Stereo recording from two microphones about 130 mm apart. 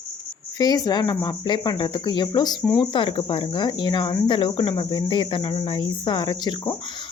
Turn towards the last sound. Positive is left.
turn(degrees=35)  # may be behind; listen again after turning